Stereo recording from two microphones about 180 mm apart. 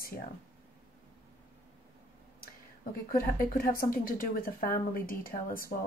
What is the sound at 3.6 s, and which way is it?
Speech, 50° left (ahead or behind).